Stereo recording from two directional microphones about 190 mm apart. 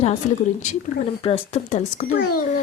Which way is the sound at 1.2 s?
35° left (ahead or behind).